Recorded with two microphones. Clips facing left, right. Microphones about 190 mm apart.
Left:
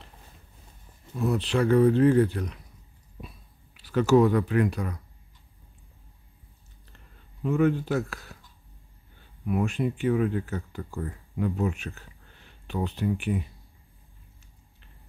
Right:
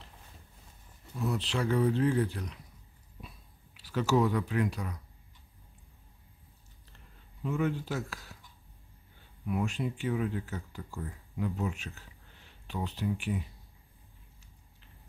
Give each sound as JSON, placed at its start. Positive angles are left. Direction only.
{"t": 1.1, "sound": "speech", "side_deg": 55}
{"t": 3.7, "sound": "speech", "side_deg": 60}
{"t": 7.4, "sound": "speech", "side_deg": 60}
{"t": 9.5, "sound": "speech", "side_deg": 55}